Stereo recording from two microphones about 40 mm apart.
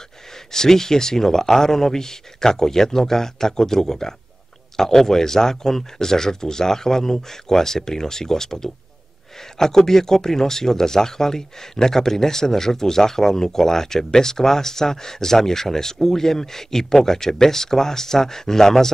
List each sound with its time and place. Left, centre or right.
0.5 s speech: centre